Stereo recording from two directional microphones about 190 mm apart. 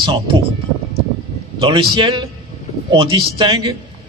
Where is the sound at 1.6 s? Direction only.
25° right (ahead or behind).